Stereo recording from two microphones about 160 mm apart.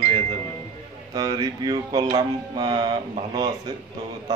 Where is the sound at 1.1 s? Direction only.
25° right (ahead or behind).